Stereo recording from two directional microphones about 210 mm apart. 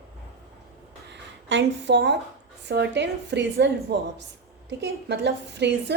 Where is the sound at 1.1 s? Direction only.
60° right (ahead or behind).